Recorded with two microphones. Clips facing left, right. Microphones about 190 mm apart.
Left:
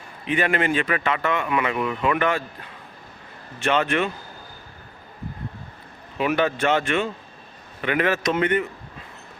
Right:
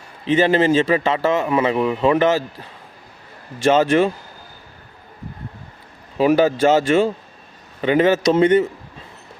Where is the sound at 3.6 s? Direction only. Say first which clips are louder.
Right 7 dB; 35° right (ahead or behind).